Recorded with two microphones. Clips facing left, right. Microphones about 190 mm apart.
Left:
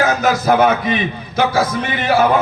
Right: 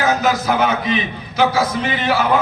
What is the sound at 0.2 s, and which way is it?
A man's voice, 50° left (ahead or behind).